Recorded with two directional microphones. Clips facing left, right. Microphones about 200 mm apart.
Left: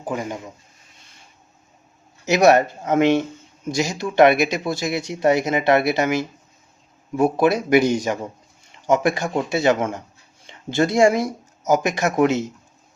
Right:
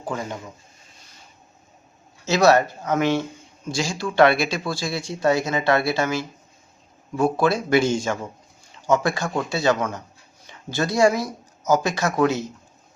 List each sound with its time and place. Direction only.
0.0 s speech: 15° left (ahead or behind)
2.2 s speech: 20° left (ahead or behind)